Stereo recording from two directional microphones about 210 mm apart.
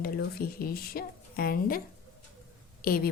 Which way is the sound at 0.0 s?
45° left (ahead or behind).